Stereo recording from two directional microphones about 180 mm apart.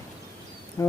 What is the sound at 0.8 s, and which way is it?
Insect, 15° left (ahead or behind).